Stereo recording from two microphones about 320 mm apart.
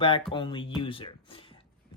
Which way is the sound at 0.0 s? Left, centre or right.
Centre.